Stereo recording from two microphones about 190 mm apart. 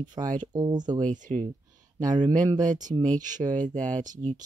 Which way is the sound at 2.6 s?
40° right (ahead or behind).